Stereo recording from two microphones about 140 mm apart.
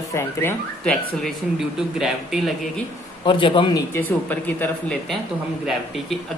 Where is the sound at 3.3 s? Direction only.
35° left (ahead or behind).